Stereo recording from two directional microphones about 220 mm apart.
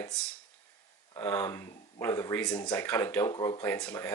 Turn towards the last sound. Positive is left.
turn(degrees=5)  # may be behind; listen again after turning